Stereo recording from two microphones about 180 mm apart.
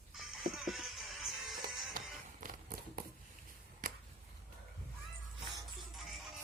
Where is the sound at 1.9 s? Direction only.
50° right (ahead or behind).